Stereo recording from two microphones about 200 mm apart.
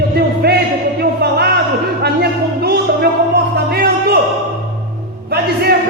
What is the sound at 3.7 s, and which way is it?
Music, 50° right (ahead or behind).